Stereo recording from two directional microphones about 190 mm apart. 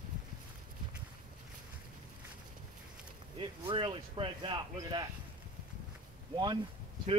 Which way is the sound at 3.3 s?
25° right (ahead or behind).